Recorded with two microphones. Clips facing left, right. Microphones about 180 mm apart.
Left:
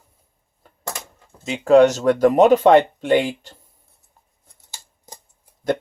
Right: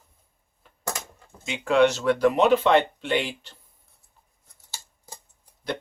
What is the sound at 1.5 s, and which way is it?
Speech, 40° left (ahead or behind).